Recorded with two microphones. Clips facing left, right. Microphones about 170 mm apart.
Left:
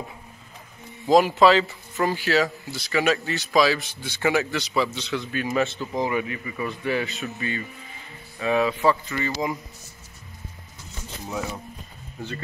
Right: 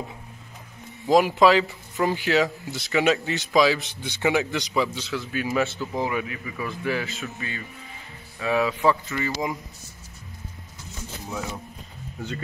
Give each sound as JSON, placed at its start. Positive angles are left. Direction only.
{"t": 1.0, "sound": "a man's voice", "side_deg": -10}